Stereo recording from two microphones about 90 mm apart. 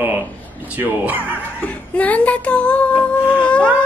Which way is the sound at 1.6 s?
15° left (ahead or behind).